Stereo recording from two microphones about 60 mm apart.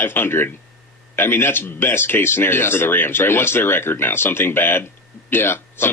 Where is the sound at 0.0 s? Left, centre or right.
Left.